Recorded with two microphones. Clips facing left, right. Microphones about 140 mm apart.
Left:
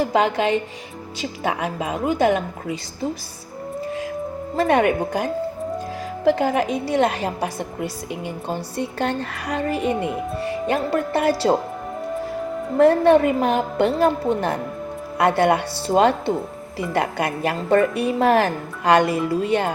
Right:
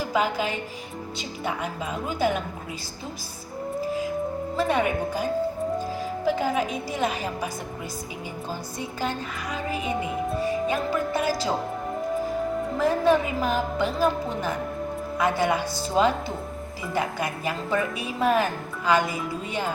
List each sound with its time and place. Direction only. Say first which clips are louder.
0.0 s a woman's voice: left 6 dB; 70° left (ahead or behind); by 2.4 s 85° left
4.6 s a woman's voice: left 6 dB; 70° left (ahead or behind)
12.7 s a woman's voice: left 8 dB; 65° left (ahead or behind)